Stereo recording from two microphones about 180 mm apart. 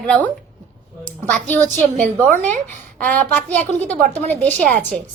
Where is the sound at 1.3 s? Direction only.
10° left (ahead or behind).